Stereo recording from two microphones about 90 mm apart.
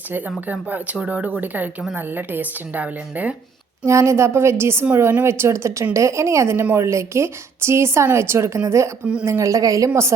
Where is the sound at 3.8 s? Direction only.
35° right (ahead or behind).